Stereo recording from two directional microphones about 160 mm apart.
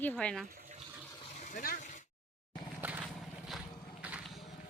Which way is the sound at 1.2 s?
45° left (ahead or behind).